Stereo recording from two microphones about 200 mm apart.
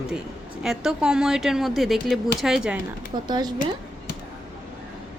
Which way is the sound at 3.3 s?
20° right (ahead or behind).